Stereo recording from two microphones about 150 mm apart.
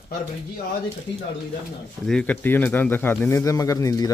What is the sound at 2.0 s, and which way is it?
A man's voice, 5° left (ahead or behind).